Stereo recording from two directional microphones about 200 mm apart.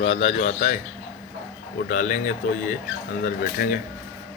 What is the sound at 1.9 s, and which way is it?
Speech, 40° left (ahead or behind).